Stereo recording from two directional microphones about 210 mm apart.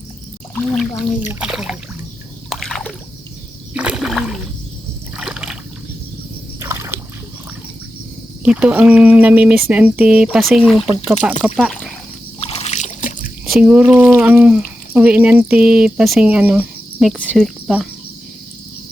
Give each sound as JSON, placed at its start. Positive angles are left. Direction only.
{"t": 0.5, "sound": "speech", "side_deg": 0}
{"t": 2.5, "sound": "splash", "side_deg": 0}
{"t": 3.8, "sound": "a sound", "side_deg": -5}
{"t": 6.6, "sound": "a sound", "side_deg": -10}
{"t": 8.4, "sound": "speech", "side_deg": -5}
{"t": 12.4, "sound": "boat", "side_deg": 30}
{"t": 13.4, "sound": "speech", "side_deg": -5}